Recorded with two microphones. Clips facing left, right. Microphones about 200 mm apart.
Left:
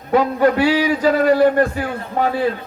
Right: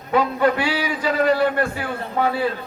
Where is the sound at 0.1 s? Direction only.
40° left (ahead or behind).